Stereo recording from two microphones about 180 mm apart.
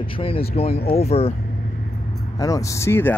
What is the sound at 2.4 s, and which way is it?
Speech, 20° left (ahead or behind).